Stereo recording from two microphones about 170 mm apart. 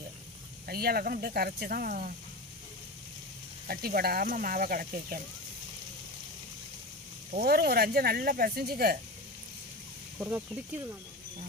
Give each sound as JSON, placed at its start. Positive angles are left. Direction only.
{"t": 0.7, "sound": "speech", "side_deg": -65}
{"t": 3.6, "sound": "speech", "side_deg": -60}
{"t": 7.3, "sound": "speech", "side_deg": -65}
{"t": 10.1, "sound": "speech", "side_deg": -10}